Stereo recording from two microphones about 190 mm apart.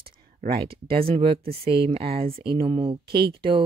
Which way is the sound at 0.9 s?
30° right (ahead or behind).